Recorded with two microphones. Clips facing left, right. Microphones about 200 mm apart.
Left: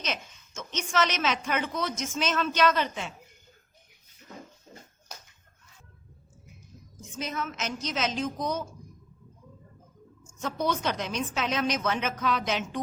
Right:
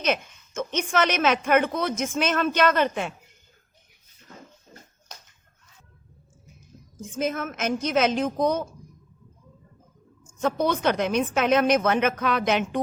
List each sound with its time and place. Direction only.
0.0 s a woman's voice: 55° right (ahead or behind)
7.0 s a woman's voice: 50° right (ahead or behind)
10.2 s a woman's voice: 55° right (ahead or behind)